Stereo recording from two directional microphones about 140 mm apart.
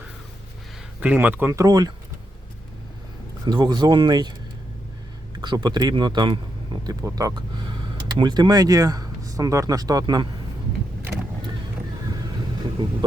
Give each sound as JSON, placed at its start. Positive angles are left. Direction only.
{"t": 0.9, "sound": "speech", "side_deg": -10}
{"t": 3.4, "sound": "speech", "side_deg": -30}
{"t": 5.4, "sound": "speech", "side_deg": -35}